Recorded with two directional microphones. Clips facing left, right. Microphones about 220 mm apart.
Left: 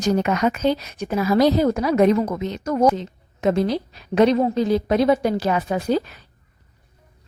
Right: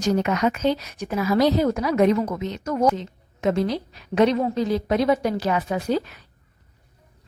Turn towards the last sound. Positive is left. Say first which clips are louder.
# left 2 dB
turn(degrees=35)  # may be behind; listen again after turning